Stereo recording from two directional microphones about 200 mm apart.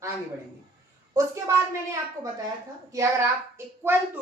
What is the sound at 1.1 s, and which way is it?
Speech, 15° right (ahead or behind).